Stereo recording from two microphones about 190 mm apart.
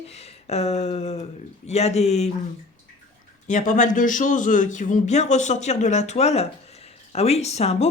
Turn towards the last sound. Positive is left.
turn(degrees=35)  # may be behind; listen again after turning